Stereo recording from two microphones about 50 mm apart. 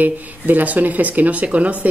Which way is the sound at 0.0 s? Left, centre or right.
Right.